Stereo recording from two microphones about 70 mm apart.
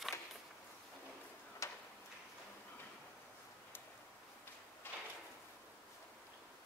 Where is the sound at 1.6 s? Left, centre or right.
Left.